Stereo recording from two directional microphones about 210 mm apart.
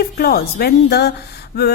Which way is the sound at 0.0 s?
45° left (ahead or behind).